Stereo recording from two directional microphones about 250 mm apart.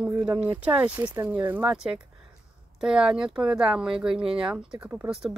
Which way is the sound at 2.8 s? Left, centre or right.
Centre.